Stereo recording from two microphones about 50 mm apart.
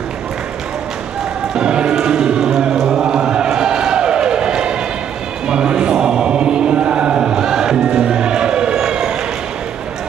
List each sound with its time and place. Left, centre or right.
1.5 s chant: centre
7.3 s music: centre